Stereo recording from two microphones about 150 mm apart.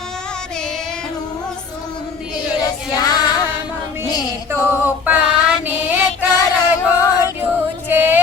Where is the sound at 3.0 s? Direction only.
25° left (ahead or behind).